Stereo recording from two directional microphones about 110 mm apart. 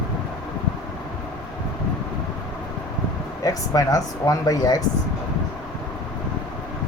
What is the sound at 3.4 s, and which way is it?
Speech, 35° left (ahead or behind).